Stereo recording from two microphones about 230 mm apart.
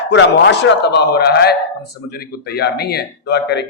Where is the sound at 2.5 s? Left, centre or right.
Left.